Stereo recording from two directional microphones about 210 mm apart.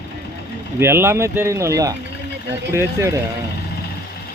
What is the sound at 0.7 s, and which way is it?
Speech, 10° right (ahead or behind).